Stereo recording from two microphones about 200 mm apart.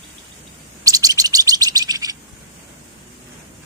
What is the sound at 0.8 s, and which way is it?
Chirp, 15° right (ahead or behind).